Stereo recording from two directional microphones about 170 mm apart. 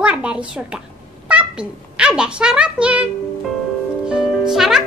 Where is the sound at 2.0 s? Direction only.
5° right (ahead or behind).